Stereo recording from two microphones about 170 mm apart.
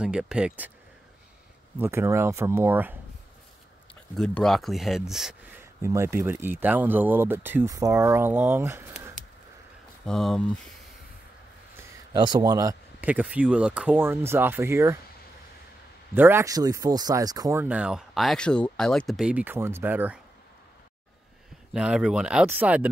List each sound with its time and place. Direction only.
0.0 s speech: 5° right (ahead or behind)
1.8 s speech: 15° right (ahead or behind)
4.1 s speech: 5° left (ahead or behind)
5.6 s speech: 15° right (ahead or behind)
10.0 s speech: 5° left (ahead or behind)
12.1 s speech: 25° right (ahead or behind)
13.0 s speech: 10° right (ahead or behind)
16.2 s speech: 15° right (ahead or behind)
21.7 s speech: 5° right (ahead or behind)